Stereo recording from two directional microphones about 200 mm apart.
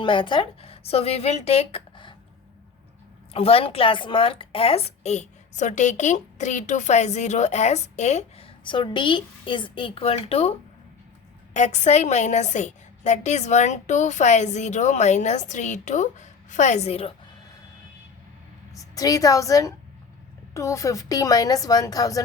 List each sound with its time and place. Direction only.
0.0 s a woman's voice: 25° left (ahead or behind)
3.3 s a woman's voice: 30° left (ahead or behind)
11.5 s a woman's voice: 35° left (ahead or behind)
18.9 s a woman's voice: 15° left (ahead or behind)